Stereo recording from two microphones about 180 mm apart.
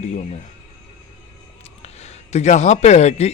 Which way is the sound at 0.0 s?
40° left (ahead or behind).